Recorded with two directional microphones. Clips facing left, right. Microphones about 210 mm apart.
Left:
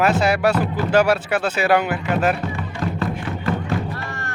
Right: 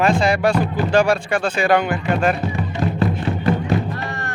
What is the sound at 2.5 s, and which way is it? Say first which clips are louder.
Music: right 4 dB; 20° right (ahead or behind).